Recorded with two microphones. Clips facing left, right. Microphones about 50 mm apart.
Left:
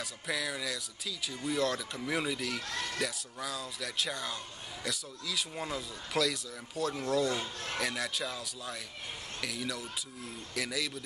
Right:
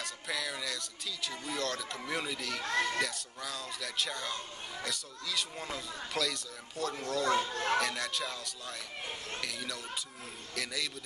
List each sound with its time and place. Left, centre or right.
0.0 s speech: centre
2.6 s speech: right
3.0 s speech: centre
7.5 s speech: right
7.8 s speech: centre